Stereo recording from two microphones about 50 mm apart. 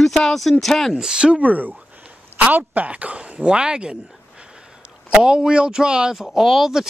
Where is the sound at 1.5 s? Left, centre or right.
Right; by 3.9 s centre.